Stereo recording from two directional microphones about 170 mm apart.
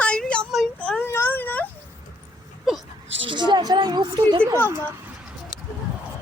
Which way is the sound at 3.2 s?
25° right (ahead or behind).